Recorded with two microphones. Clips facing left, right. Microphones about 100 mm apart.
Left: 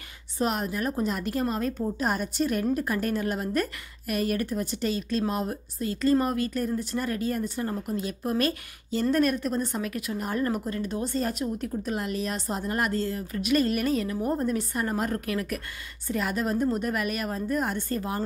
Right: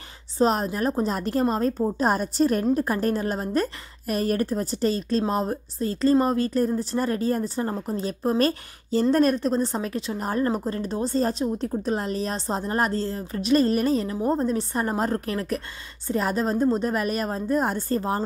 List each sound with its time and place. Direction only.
0.4 s a woman's voice: 30° right (ahead or behind)